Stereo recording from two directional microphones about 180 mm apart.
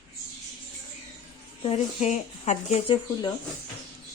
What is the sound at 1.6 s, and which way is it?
Speech, 35° left (ahead or behind).